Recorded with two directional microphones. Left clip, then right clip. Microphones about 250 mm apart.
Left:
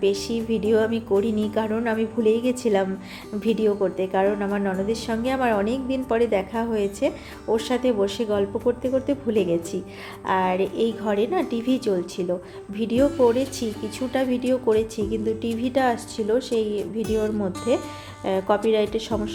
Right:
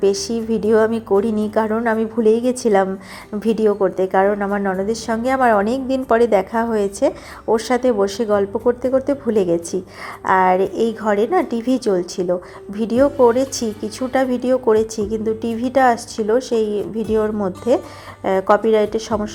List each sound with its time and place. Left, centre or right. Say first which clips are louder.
0.0 s a woman's voice: right 5 dB; centre
17.0 s speech: right 6 dB; centre
18.2 s a woman's voice: right 7 dB; centre